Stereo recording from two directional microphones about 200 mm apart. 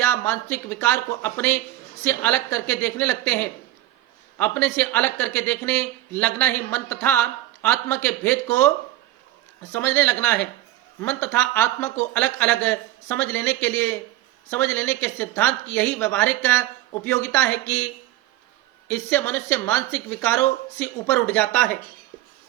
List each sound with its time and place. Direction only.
0.0 s speech: 10° left (ahead or behind)
9.7 s speech: 10° left (ahead or behind)
18.9 s speech: 10° left (ahead or behind)